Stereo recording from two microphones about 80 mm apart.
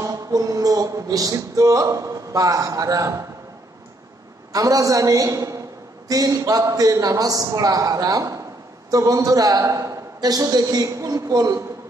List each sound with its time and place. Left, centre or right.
0.0 s music: right
4.5 s a man's voice: right